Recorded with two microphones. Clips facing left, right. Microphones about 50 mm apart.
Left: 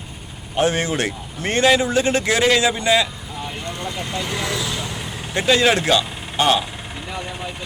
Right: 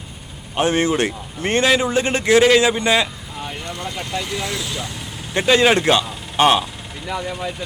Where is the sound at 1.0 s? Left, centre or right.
Centre.